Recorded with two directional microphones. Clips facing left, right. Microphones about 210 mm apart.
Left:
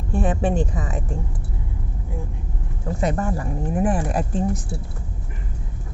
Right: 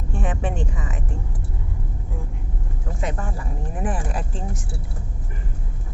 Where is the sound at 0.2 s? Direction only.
35° left (ahead or behind).